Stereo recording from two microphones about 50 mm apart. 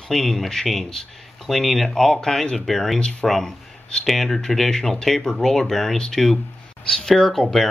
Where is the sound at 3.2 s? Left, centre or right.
Centre.